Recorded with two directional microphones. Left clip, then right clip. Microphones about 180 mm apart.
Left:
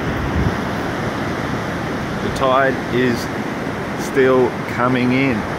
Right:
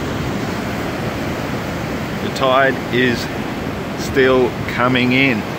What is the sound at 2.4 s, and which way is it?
Speech, centre (ahead or behind).